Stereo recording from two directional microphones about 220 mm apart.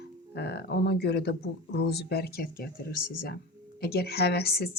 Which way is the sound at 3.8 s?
45° left (ahead or behind).